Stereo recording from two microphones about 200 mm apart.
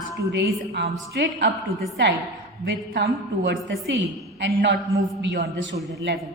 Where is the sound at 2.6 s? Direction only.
60° right (ahead or behind).